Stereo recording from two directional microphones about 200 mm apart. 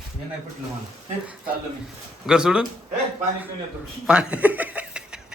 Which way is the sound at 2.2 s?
5° right (ahead or behind).